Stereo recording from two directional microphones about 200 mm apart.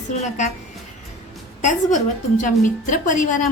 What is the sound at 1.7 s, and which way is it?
A woman's voice, 40° left (ahead or behind).